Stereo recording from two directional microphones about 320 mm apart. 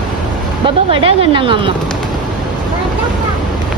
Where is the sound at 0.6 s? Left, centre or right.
Centre.